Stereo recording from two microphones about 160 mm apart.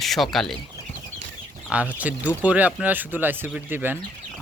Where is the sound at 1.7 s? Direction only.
10° right (ahead or behind).